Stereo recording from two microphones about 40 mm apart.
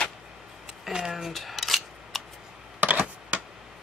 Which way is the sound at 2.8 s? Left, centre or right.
Right.